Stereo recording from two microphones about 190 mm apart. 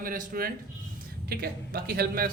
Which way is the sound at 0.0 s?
45° right (ahead or behind).